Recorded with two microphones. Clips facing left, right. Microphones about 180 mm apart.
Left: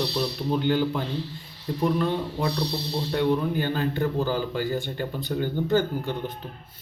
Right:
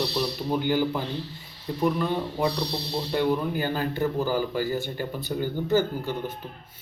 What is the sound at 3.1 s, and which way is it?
A man's voice, 5° right (ahead or behind).